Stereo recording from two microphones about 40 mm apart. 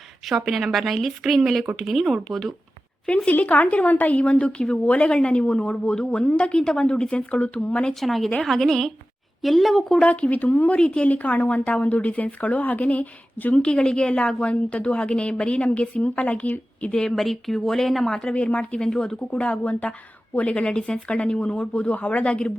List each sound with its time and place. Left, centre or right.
0.3 s speech: centre
3.2 s a woman's voice: left
7.2 s a woman's voice: left
8.0 s a woman's voice: centre
10.0 s a woman's voice: left
10.8 s a woman's voice: left
11.1 s a woman's voice: left
13.5 s a woman's voice: left
16.9 s a woman's voice: centre
17.2 s speech: centre
18.1 s a woman's voice: left
19.3 s a woman's voice: left
20.7 s a woman's voice: left
21.9 s a woman's voice: left